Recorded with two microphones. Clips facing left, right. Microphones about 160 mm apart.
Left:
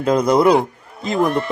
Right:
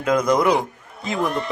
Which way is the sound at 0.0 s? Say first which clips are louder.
Left 4 dB; 30° left (ahead or behind).